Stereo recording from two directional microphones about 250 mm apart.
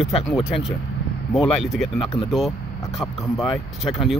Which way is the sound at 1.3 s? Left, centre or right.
Centre.